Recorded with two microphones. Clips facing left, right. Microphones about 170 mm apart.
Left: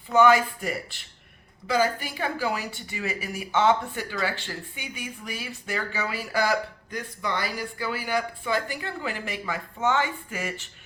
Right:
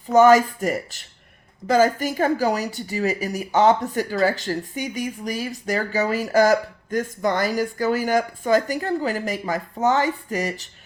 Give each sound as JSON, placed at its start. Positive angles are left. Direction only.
{"t": 0.1, "sound": "a woman's voice", "side_deg": -40}